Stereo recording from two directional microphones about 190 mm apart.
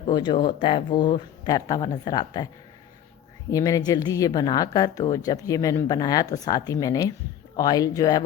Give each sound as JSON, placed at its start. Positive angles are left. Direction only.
{"t": 0.1, "sound": "speech", "side_deg": 25}
{"t": 3.5, "sound": "speech", "side_deg": 20}